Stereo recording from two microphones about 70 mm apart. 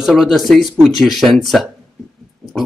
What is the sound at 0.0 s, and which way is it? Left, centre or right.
Speech, centre.